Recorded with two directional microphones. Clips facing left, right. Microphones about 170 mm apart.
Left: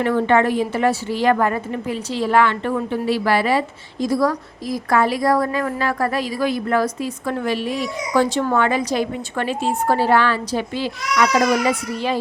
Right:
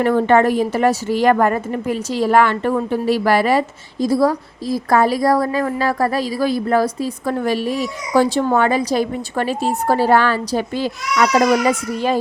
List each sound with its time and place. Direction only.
0.0 s a woman's voice: 40° right (ahead or behind)
4.0 s a woman's voice: 30° right (ahead or behind); by 12.2 s 45° right (ahead or behind)